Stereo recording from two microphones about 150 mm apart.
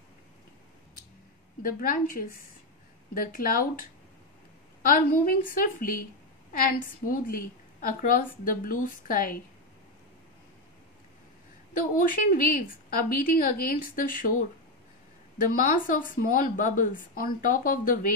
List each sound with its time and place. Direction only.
1.6 s a woman's voice: 70° left (ahead or behind)
4.8 s a woman's voice: 70° left (ahead or behind)
11.8 s a woman's voice: 70° left (ahead or behind)